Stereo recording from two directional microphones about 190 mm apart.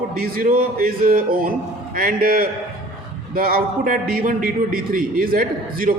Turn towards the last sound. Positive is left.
turn(degrees=-50)  # may be behind; listen again after turning